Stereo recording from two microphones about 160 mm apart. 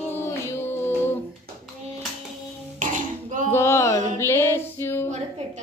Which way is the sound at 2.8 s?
55° right (ahead or behind).